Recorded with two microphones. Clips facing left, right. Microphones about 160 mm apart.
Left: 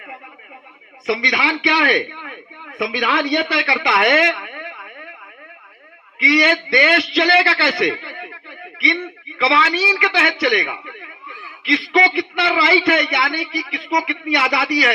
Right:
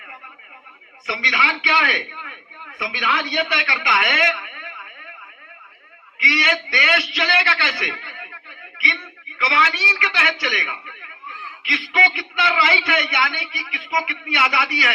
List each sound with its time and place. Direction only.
1.0 s a man's voice: 35° left (ahead or behind)
6.2 s a man's voice: 35° left (ahead or behind)